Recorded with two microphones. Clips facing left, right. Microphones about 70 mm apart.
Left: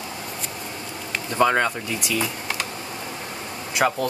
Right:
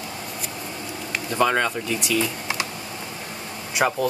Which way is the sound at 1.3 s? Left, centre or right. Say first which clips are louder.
Left 1 dB; centre.